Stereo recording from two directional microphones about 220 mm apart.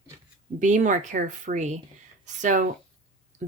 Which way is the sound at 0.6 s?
35° right (ahead or behind).